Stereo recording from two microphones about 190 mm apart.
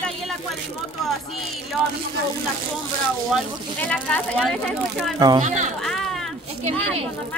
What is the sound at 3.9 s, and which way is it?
Speech, 5° left (ahead or behind).